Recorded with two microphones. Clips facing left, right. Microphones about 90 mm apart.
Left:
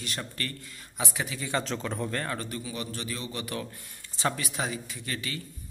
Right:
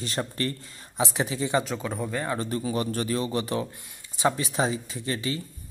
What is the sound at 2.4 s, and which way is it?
A man's voice, 35° right (ahead or behind).